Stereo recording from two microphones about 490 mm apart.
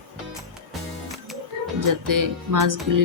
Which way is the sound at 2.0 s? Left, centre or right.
Right.